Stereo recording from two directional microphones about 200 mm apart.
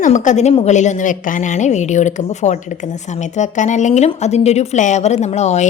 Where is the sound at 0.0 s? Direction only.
40° left (ahead or behind).